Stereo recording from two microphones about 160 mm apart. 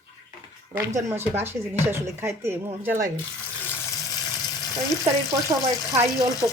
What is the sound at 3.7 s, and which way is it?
Water, 25° left (ahead or behind).